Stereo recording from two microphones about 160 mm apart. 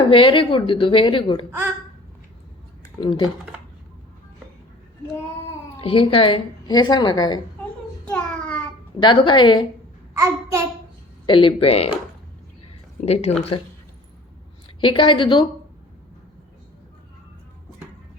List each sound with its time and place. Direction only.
0.1 s a woman's voice: 35° left (ahead or behind)
3.0 s a woman's voice: 30° left (ahead or behind)
5.8 s a woman's voice: 35° left (ahead or behind)
8.0 s a sound: 10° left (ahead or behind)
9.0 s a woman's voice: 30° left (ahead or behind)
10.2 s a child's voice: 20° right (ahead or behind)
11.3 s a woman's voice: 35° left (ahead or behind)
13.0 s speech: 45° left (ahead or behind)
14.8 s a woman's voice: 30° left (ahead or behind)